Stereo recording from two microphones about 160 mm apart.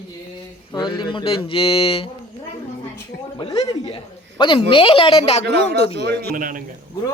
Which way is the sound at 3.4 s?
35° left (ahead or behind).